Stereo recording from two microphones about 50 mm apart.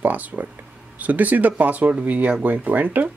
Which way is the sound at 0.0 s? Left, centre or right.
Right.